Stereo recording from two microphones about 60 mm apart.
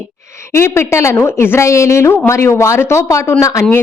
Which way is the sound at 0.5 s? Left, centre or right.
Left.